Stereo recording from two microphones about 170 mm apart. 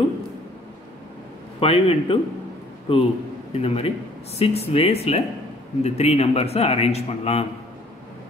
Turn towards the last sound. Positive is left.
turn(degrees=40)  # may be behind; listen again after turning